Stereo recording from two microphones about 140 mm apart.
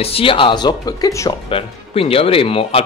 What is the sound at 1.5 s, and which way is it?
Speech, 40° left (ahead or behind).